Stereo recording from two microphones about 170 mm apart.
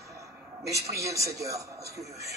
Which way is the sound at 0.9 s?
20° right (ahead or behind).